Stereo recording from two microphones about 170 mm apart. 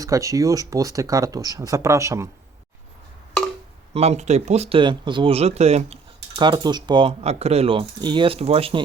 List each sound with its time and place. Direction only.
0.0 s speech: 20° right (ahead or behind)
3.9 s speech: 40° right (ahead or behind)
6.4 s speech: 25° right (ahead or behind)